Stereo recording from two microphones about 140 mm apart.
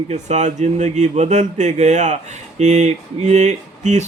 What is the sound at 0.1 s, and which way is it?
Speech, 55° right (ahead or behind).